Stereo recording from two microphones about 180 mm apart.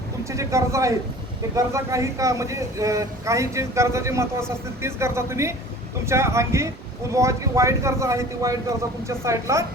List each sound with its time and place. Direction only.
0.3 s speech: 15° right (ahead or behind)